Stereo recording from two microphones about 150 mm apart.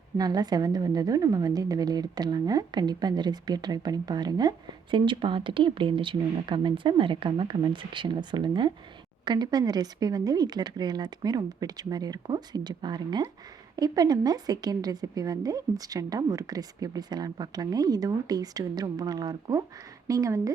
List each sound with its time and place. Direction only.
0.2 s a woman's voice: 25° right (ahead or behind)